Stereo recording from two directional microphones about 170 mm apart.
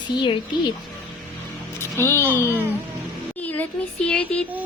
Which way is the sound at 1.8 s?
15° left (ahead or behind).